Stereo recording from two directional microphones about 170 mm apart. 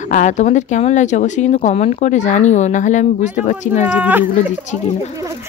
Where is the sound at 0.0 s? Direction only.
45° left (ahead or behind).